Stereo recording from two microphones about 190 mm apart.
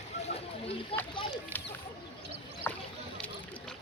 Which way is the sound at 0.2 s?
30° left (ahead or behind).